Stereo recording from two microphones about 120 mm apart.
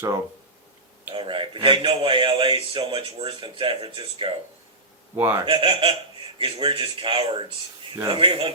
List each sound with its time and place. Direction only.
1.1 s a man's voice: 45° right (ahead or behind)
5.1 s speech: 15° right (ahead or behind)
5.5 s a man's voice: 45° right (ahead or behind)